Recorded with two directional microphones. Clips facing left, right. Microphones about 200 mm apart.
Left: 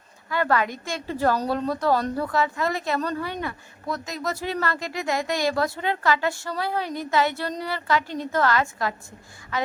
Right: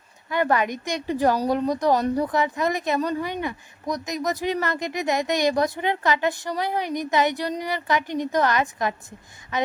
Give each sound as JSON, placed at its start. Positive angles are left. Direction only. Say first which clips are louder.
{"t": 0.3, "sound": "a woman's voice", "louder": "right 1 dB", "side_deg": -20}